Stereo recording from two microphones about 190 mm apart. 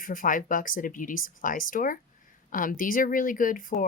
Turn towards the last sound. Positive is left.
turn(degrees=45)  # may be behind; listen again after turning